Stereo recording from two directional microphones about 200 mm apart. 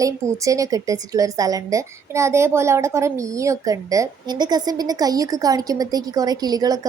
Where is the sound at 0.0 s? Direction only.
15° right (ahead or behind).